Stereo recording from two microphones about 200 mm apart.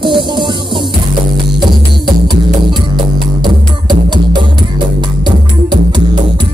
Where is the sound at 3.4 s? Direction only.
20° right (ahead or behind).